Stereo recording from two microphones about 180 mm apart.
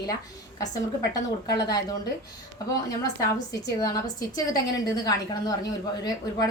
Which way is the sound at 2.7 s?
20° left (ahead or behind).